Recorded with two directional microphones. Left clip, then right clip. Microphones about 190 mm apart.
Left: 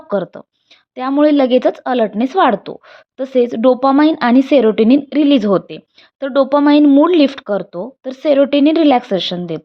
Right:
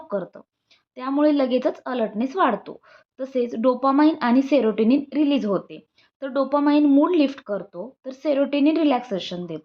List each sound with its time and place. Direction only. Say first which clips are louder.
0.1 s speech: left 10 dB; 40° left (ahead or behind)